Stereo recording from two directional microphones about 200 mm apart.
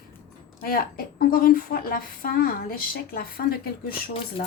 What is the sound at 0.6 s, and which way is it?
A woman's voice, 50° left (ahead or behind).